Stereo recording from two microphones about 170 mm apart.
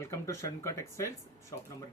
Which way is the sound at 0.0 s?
15° left (ahead or behind).